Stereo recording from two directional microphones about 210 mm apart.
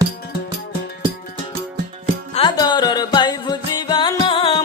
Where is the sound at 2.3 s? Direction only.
20° left (ahead or behind).